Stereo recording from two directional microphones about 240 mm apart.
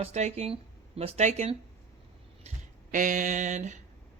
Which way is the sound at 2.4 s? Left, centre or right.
Right.